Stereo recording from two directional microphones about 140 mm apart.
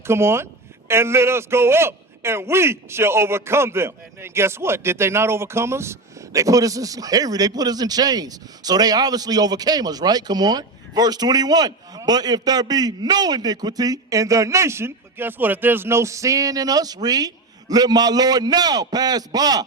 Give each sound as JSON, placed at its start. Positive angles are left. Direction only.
{"t": 0.1, "sound": "a man's voice", "side_deg": -20}